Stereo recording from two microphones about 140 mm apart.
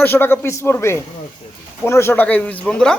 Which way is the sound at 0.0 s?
15° left (ahead or behind).